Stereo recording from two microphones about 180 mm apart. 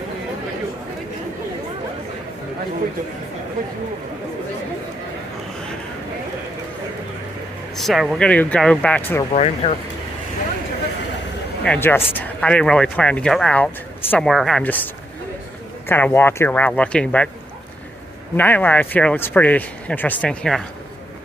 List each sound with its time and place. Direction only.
7.7 s speech: centre (ahead or behind)
9.3 s speech: 35° left (ahead or behind)
11.6 s speech: 10° left (ahead or behind)
15.9 s speech: 10° left (ahead or behind)
18.3 s speech: 10° left (ahead or behind)